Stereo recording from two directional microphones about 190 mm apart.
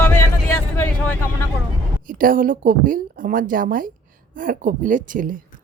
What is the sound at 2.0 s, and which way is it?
A woman's voice, 45° right (ahead or behind).